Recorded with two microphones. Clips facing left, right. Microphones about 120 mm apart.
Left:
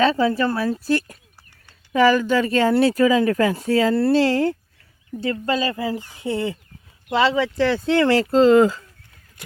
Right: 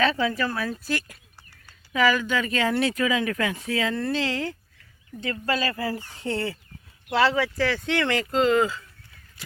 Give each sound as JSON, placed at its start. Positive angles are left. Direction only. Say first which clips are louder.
{"t": 0.0, "sound": "speech", "louder": "left 6 dB", "side_deg": 30}
{"t": 5.2, "sound": "speech", "louder": "left 5 dB", "side_deg": 25}